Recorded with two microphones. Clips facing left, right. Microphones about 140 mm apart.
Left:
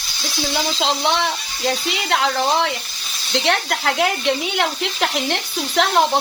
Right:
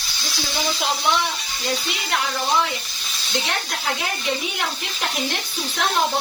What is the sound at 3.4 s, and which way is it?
Speech, 80° left.